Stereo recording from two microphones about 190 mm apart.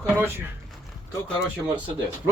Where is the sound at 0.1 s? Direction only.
10° right (ahead or behind).